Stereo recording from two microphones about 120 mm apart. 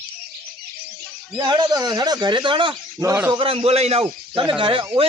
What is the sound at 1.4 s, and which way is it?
Speech, 35° right (ahead or behind).